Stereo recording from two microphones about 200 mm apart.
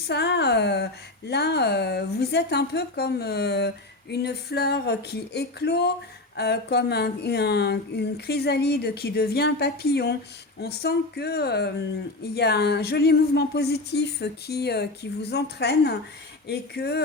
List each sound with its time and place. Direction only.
0.1 s speech: 55° left (ahead or behind)